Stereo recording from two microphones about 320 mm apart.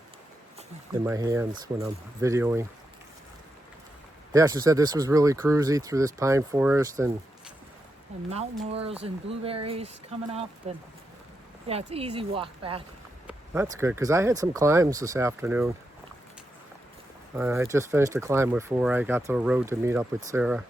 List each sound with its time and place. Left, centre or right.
0.9 s speech: centre
4.3 s speech: centre
8.3 s speech: centre
17.3 s speech: centre